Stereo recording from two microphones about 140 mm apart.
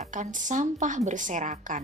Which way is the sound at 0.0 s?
65° right (ahead or behind).